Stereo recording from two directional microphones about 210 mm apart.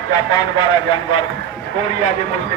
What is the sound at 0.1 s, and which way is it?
Speech, 20° left (ahead or behind).